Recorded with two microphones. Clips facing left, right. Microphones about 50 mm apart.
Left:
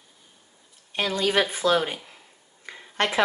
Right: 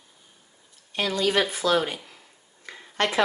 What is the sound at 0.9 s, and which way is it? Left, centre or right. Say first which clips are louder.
A woman's voice: even; left.